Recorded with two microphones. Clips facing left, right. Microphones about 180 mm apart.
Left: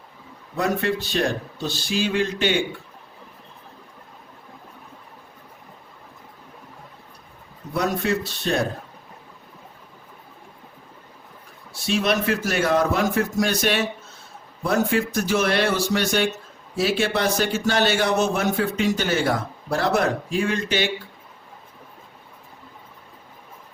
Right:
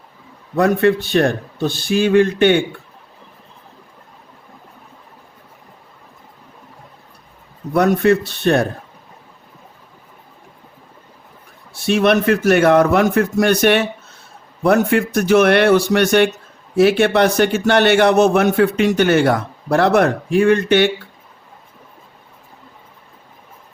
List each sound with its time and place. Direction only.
0.5 s a man's voice: 60° right (ahead or behind)
7.7 s a man's voice: 60° right (ahead or behind)
11.7 s a man's voice: 60° right (ahead or behind)